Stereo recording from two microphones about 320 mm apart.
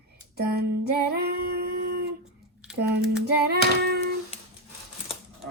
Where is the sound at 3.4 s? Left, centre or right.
Right.